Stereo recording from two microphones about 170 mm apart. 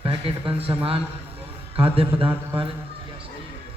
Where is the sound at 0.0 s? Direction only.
30° right (ahead or behind).